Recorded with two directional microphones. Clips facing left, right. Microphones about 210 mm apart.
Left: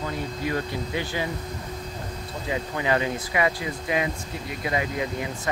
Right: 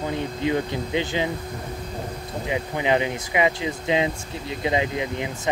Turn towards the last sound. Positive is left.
turn(degrees=-20)  # may be behind; listen again after turning